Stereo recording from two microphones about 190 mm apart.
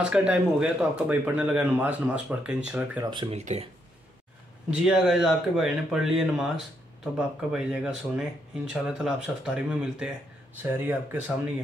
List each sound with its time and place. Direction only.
0.0 s speech: 5° right (ahead or behind)
3.0 s speech: 25° right (ahead or behind)
4.6 s speech: 5° right (ahead or behind)